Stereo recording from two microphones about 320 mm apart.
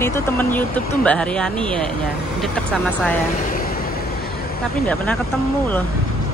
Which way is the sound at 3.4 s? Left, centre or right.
Left.